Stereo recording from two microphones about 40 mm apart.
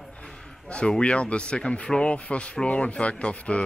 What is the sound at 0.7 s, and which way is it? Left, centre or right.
A man's voice, left.